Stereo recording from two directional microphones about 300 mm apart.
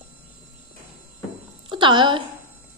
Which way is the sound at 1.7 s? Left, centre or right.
Centre.